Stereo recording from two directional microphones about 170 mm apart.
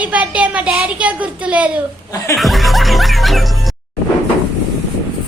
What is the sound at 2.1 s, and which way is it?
Speech, 20° left (ahead or behind).